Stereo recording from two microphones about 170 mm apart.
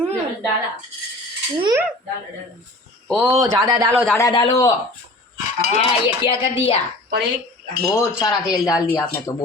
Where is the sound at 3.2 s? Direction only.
20° right (ahead or behind).